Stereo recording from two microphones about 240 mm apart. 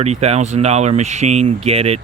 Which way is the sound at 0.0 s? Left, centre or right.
Right.